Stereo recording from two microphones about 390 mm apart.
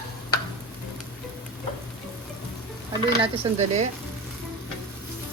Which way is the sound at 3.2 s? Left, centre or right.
Centre.